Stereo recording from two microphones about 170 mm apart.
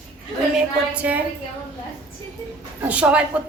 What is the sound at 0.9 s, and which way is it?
Speech, 10° right (ahead or behind).